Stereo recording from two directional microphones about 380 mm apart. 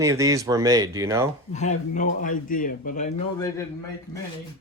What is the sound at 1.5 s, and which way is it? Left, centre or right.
A man's voice, centre.